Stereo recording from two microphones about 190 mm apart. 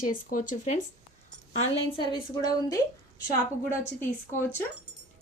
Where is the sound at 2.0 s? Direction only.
20° left (ahead or behind).